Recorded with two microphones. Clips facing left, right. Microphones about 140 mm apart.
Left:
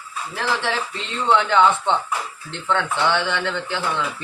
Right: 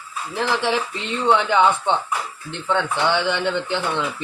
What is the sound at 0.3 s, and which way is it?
A man's voice, 15° right (ahead or behind).